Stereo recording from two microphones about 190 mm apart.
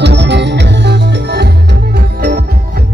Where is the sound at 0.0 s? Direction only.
65° right (ahead or behind).